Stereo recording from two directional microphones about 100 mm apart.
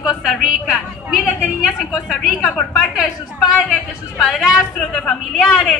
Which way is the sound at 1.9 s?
Centre (ahead or behind).